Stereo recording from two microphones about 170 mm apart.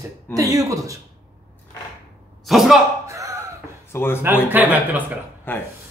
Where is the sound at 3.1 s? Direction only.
20° right (ahead or behind).